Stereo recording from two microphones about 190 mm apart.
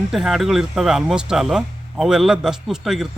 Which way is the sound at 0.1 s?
Centre (ahead or behind).